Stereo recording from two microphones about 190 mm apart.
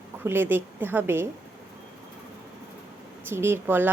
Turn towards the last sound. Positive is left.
turn(degrees=-10)  # may be behind; listen again after turning